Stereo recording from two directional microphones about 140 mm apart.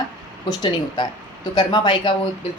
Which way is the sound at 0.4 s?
30° left (ahead or behind).